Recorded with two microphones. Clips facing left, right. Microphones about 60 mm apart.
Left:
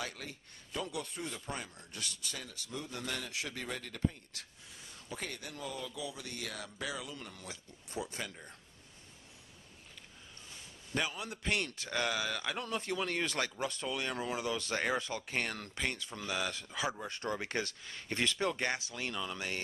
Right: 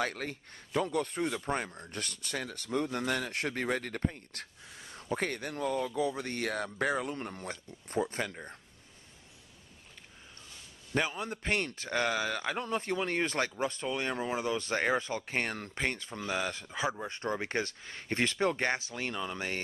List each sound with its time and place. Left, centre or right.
0.0 s speech: right
11.0 s a man's voice: right